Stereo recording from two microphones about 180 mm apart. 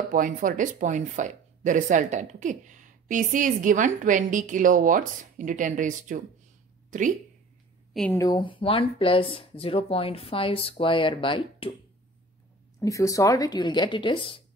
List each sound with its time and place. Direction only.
0.1 s speech: 50° right (ahead or behind)
7.9 s a woman's voice: 5° left (ahead or behind)
8.2 s speech: 25° left (ahead or behind)
12.8 s speech: 15° left (ahead or behind)